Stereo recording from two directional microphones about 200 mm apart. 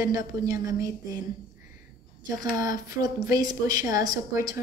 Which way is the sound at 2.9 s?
20° right (ahead or behind).